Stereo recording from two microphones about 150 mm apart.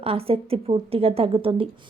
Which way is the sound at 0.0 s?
40° right (ahead or behind).